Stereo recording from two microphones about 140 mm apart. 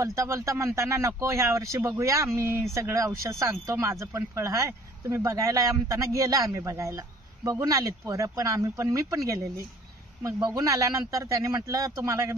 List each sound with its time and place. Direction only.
0.0 s speech: 20° right (ahead or behind)